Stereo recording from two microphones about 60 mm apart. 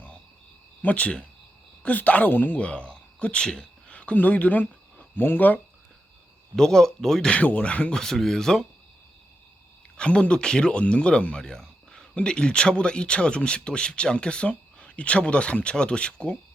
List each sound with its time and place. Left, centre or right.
0.8 s speech: left
6.6 s speech: centre
10.0 s speech: centre